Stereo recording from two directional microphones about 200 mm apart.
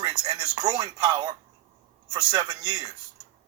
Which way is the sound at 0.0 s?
20° right (ahead or behind).